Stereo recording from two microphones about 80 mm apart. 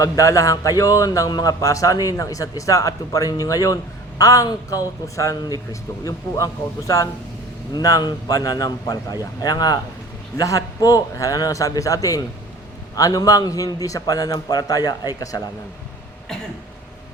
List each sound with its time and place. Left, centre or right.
0.0 s a man's voice: left
10.4 s a man's voice: left